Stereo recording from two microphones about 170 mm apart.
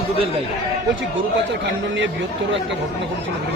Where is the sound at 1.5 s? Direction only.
90° right.